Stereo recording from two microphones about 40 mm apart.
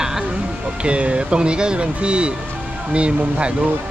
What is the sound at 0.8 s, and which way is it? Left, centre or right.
Speech, right.